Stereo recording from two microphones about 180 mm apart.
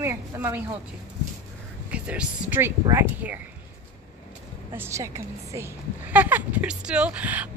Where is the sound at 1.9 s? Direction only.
5° right (ahead or behind).